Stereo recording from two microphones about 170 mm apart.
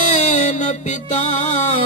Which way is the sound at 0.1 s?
45° left (ahead or behind).